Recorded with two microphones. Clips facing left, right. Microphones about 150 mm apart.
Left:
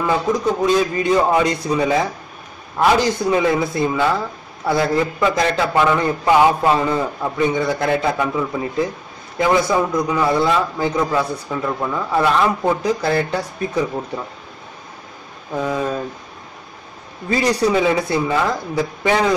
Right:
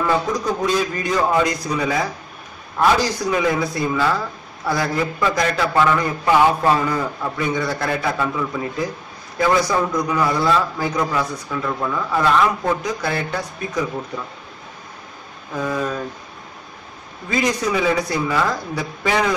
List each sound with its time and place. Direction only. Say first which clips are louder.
0.0 s a man's voice: left 2 dB; 25° left (ahead or behind)
12.8 s a man's voice: left 5 dB; 30° left (ahead or behind)
15.5 s a man's voice: left 2 dB; 20° left (ahead or behind)
17.3 s a man's voice: left 4 dB; 35° left (ahead or behind)